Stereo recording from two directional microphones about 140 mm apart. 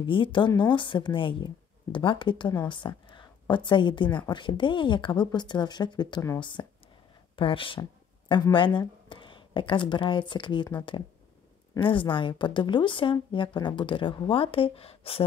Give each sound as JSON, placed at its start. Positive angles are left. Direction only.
{"t": 0.0, "sound": "a woman's voice", "side_deg": 35}
{"t": 11.8, "sound": "a woman's voice", "side_deg": 35}